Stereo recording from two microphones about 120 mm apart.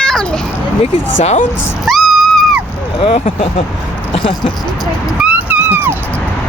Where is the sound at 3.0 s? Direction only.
50° left (ahead or behind).